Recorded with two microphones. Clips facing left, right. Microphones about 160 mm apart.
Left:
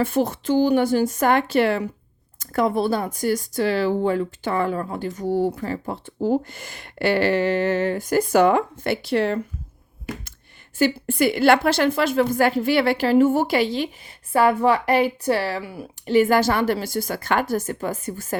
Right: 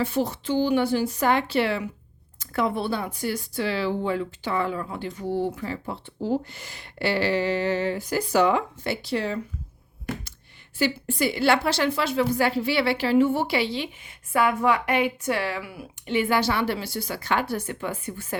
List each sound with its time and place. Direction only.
0.0 s a woman's voice: 50° left (ahead or behind)
10.8 s a woman's voice: 50° left (ahead or behind)